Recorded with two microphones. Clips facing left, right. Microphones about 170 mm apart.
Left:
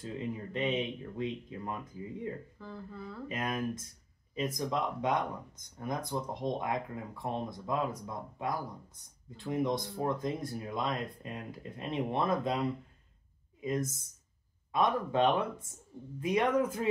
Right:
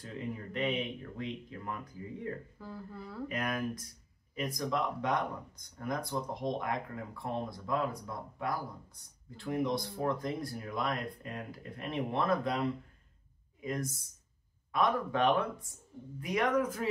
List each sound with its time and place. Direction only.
0.0 s speech: 25° left (ahead or behind)
2.6 s speech: 5° right (ahead or behind)
3.3 s speech: 25° left (ahead or behind)
13.6 s speech: 20° left (ahead or behind)